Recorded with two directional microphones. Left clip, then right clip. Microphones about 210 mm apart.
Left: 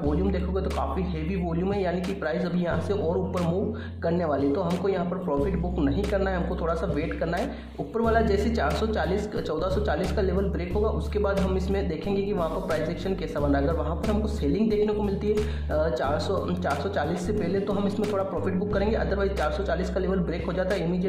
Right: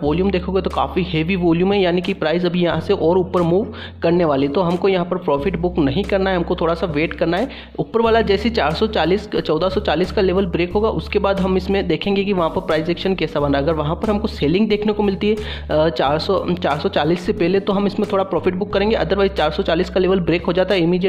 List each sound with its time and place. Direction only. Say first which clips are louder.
0.1 s speech: right 9 dB; 30° right (ahead or behind)